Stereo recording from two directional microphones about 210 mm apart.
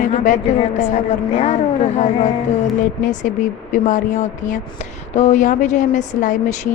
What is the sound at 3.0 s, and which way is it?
A woman's voice, 35° left (ahead or behind).